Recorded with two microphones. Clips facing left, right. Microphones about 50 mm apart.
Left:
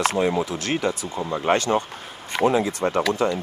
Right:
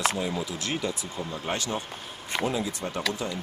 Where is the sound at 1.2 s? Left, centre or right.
Left.